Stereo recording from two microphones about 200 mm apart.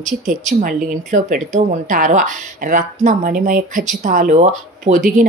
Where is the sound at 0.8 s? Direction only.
40° right (ahead or behind).